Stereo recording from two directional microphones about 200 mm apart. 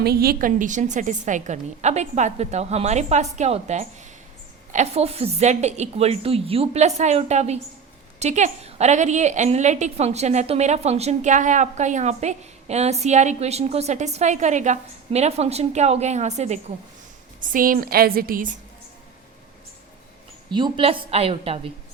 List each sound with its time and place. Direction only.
0.0 s a woman's voice: 50° right (ahead or behind)
20.5 s a woman's voice: 25° right (ahead or behind)